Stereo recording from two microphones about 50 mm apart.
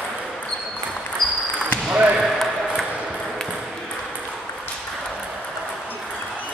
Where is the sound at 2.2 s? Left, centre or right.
Centre.